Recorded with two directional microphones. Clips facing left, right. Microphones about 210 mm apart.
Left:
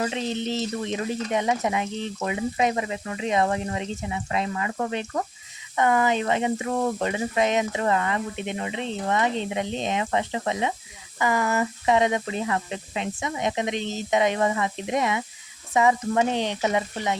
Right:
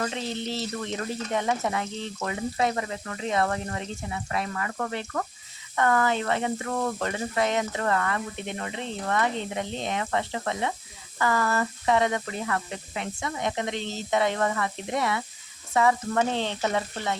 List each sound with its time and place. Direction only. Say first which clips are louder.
0.0 s speech: left 3 dB; 15° left (ahead or behind)